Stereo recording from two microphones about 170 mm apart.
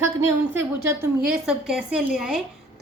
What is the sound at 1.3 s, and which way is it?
A woman's voice, 5° right (ahead or behind).